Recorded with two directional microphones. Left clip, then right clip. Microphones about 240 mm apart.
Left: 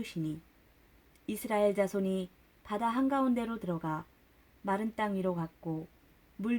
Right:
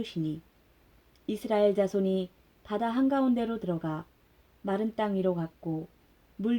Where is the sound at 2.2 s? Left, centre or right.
Centre.